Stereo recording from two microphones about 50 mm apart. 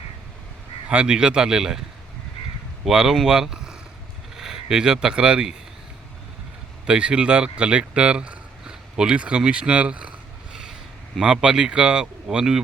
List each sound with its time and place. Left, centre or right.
0.9 s speech: right
2.8 s speech: centre
3.2 s a sound: centre
4.4 s speech: centre
6.8 s speech: right